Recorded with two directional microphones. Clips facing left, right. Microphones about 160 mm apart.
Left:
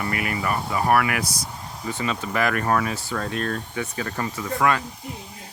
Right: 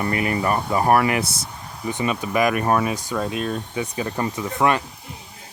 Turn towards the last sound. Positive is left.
turn(degrees=-20)  # may be behind; listen again after turning